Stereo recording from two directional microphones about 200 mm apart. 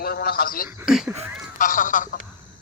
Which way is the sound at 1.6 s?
40° left (ahead or behind).